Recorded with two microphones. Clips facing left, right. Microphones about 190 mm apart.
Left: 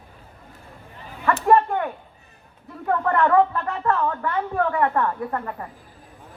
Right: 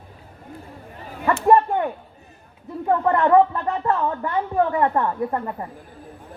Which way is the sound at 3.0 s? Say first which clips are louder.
Right 2 dB; 20° right (ahead or behind).